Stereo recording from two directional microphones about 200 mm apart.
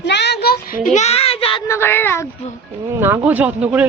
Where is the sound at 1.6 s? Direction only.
15° left (ahead or behind).